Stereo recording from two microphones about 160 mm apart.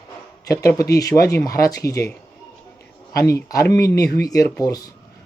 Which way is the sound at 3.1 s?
20° left (ahead or behind).